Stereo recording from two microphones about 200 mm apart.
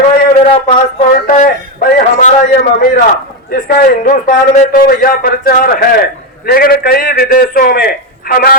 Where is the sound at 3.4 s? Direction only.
45° left (ahead or behind).